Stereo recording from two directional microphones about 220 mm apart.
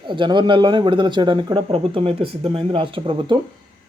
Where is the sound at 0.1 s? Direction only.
20° right (ahead or behind).